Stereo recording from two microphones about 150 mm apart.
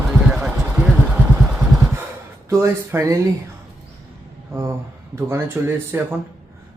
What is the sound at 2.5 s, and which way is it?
Speech, 20° right (ahead or behind).